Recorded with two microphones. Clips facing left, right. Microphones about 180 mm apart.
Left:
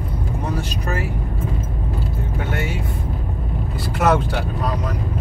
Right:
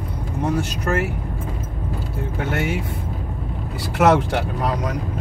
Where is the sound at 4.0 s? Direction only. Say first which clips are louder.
Right 2 dB; 70° right (ahead or behind).